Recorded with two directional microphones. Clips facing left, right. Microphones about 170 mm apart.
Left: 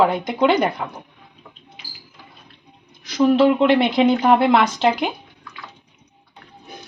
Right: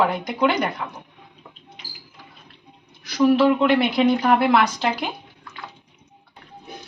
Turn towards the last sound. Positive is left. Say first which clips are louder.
# left 3 dB
turn(degrees=25)  # may be behind; listen again after turning